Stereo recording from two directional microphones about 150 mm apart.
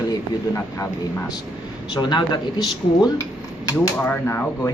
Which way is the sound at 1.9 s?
30° left (ahead or behind).